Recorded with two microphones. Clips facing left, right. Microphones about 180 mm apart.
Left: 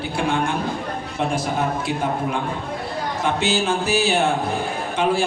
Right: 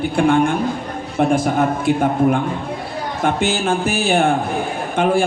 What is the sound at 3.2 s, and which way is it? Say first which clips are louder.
A man's voice: right 3 dB; 50° right (ahead or behind).